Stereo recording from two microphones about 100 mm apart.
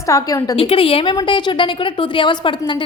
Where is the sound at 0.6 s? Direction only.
65° left (ahead or behind).